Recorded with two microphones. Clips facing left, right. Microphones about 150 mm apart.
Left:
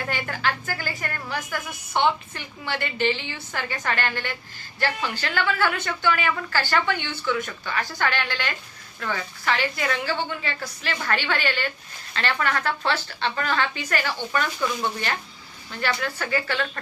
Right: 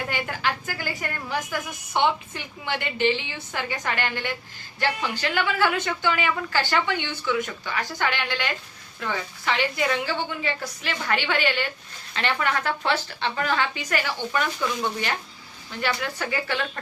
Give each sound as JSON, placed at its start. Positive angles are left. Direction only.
{"t": 0.1, "sound": "a sound", "side_deg": -15}
{"t": 2.0, "sound": "speech", "side_deg": -15}
{"t": 15.8, "sound": "speech", "side_deg": -15}